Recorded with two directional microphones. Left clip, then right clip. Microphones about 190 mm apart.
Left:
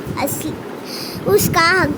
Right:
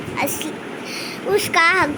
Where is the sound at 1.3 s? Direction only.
30° left (ahead or behind).